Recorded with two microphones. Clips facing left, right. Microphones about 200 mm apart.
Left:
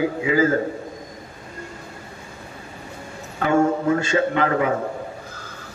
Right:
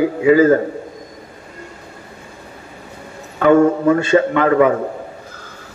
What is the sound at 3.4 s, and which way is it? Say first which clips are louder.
A man's voice: right 7 dB; 60° right (ahead or behind).